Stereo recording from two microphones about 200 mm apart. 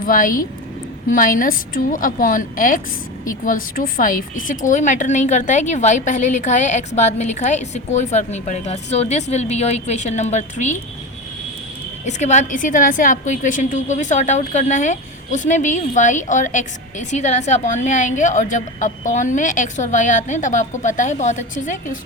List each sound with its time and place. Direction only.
0.0 s a woman's voice: 45° left (ahead or behind)
12.0 s a woman's voice: 35° left (ahead or behind)